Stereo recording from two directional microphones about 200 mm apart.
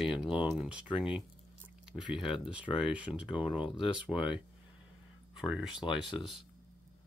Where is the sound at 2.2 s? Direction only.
25° left (ahead or behind).